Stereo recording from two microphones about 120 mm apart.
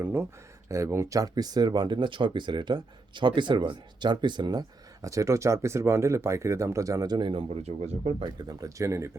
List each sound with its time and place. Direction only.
0.0 s speech: 15° right (ahead or behind); by 4.6 s 35° right (ahead or behind)
5.0 s speech: 25° right (ahead or behind); by 8.1 s 60° right (ahead or behind)
8.2 s speech: 35° right (ahead or behind)